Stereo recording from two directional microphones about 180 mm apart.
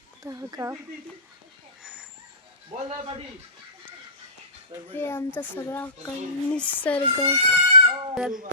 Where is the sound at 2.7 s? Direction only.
35° right (ahead or behind).